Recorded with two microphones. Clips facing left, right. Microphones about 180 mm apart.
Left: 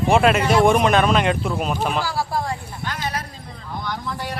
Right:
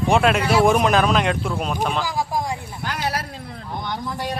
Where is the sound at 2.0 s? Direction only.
15° right (ahead or behind).